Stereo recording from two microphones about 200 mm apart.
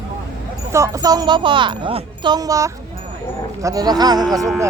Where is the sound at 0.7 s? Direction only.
15° right (ahead or behind).